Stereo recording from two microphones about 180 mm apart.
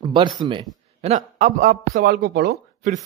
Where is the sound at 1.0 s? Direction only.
40° right (ahead or behind); by 2.5 s 60° right (ahead or behind).